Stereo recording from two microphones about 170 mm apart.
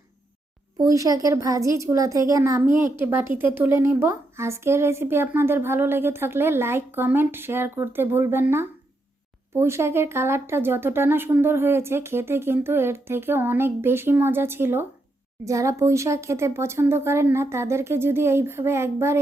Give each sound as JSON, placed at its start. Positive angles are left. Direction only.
{"t": 0.8, "sound": "speech", "side_deg": -20}